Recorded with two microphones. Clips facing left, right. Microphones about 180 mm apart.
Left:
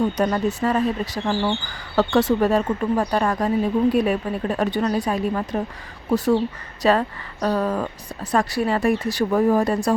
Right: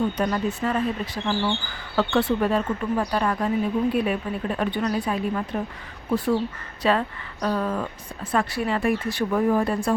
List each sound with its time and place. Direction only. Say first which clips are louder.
0.2 s a woman's voice: left 3 dB; 40° left (ahead or behind)
6.8 s a woman's voice: left 4 dB; 40° left (ahead or behind)